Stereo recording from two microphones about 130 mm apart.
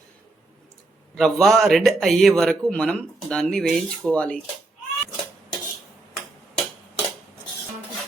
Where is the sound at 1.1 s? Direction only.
5° left (ahead or behind).